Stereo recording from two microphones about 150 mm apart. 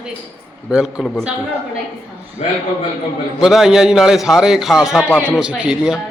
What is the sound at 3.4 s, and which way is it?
A man's voice, 5° right (ahead or behind).